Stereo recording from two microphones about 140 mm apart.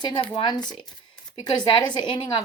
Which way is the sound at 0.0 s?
35° left (ahead or behind).